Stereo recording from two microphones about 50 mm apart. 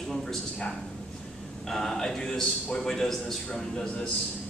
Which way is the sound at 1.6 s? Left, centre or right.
Centre.